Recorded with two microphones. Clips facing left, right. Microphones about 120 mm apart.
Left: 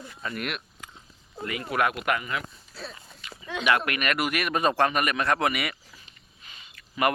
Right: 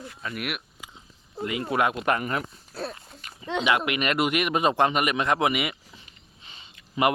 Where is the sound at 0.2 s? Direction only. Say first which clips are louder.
Even; 5° right (ahead or behind).